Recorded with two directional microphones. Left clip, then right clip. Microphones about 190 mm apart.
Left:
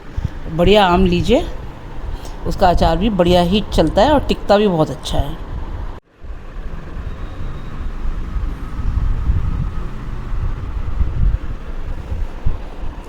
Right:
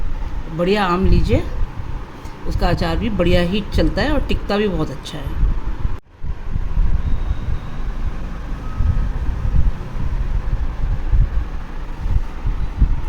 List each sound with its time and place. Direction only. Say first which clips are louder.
0.5 s speech: left 6 dB; 35° left (ahead or behind)
2.5 s speech: left 8 dB; 35° left (ahead or behind)